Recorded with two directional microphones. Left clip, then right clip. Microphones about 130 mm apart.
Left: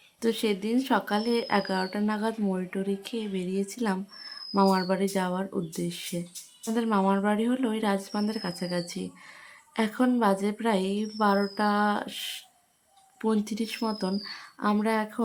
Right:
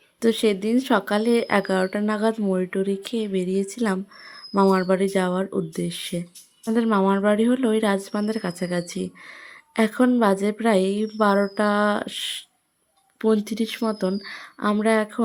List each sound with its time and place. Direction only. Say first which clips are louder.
0.2 s speech: right 7 dB; 40° right (ahead or behind)